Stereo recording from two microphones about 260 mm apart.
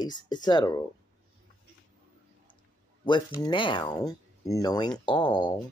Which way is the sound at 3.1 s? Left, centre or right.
Centre.